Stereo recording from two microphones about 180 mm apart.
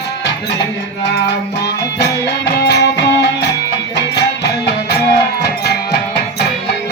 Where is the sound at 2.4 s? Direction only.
65° left (ahead or behind).